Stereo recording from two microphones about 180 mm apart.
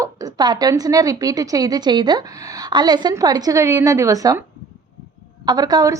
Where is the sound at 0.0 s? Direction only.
20° right (ahead or behind).